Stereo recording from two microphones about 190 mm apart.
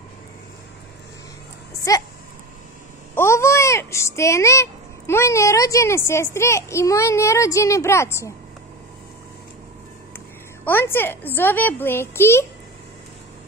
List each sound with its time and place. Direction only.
1.9 s a child's voice: 15° left (ahead or behind)
3.2 s a child's voice: 15° left (ahead or behind)
10.1 s a woman's voice: 10° left (ahead or behind)